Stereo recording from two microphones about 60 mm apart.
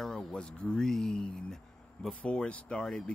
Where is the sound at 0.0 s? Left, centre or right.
Centre.